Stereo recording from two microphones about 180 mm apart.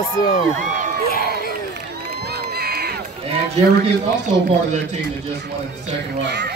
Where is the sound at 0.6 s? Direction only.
45° right (ahead or behind).